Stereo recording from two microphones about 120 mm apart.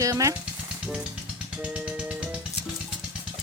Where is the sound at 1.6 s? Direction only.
10° right (ahead or behind).